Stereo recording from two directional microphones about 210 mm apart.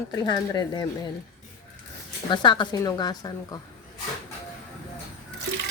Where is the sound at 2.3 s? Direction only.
20° left (ahead or behind).